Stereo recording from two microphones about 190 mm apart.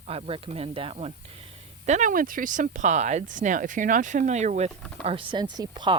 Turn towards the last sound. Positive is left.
turn(degrees=-25)  # may be behind; listen again after turning